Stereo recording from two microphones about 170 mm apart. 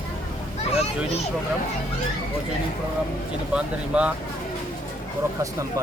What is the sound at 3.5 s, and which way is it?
Speech, 5° right (ahead or behind).